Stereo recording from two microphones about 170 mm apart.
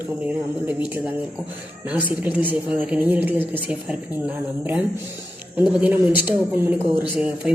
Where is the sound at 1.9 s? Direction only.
10° right (ahead or behind).